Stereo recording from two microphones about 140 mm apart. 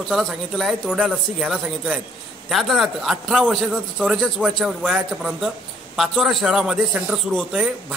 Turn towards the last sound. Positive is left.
turn(degrees=-5)  # may be behind; listen again after turning